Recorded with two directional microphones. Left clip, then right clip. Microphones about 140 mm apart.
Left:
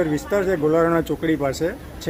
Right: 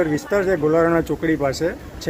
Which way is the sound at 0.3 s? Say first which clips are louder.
Right 1 dB; 5° left (ahead or behind).